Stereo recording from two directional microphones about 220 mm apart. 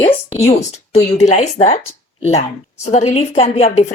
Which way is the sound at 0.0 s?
30° left (ahead or behind).